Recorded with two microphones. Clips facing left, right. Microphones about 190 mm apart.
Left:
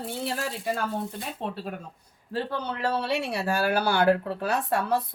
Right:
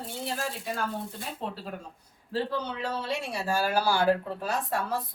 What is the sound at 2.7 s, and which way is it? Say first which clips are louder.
A woman's voice: left 5 dB; 60° left (ahead or behind).